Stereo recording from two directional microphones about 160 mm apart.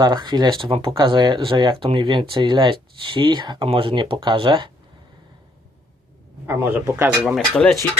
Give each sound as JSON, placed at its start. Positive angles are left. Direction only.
{"t": 0.0, "sound": "speech", "side_deg": -25}
{"t": 6.4, "sound": "speech", "side_deg": -15}